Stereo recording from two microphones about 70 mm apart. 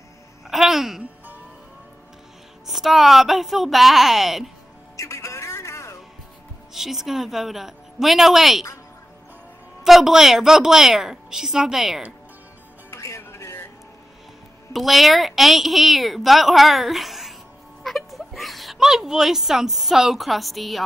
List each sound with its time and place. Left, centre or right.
0.5 s a sound: centre
2.6 s a woman's voice: centre
4.9 s music: left
6.7 s a woman's voice: centre
9.8 s a woman's voice: centre
12.9 s music: left
14.7 s a woman's voice: centre